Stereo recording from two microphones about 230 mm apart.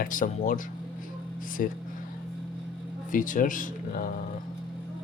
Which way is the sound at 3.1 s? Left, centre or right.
Left.